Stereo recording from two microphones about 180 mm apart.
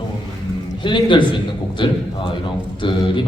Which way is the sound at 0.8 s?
25° left (ahead or behind).